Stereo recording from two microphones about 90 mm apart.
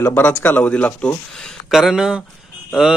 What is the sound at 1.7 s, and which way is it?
Speech, 5° right (ahead or behind).